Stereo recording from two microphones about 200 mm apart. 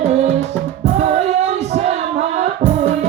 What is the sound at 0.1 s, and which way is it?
Music, 35° right (ahead or behind).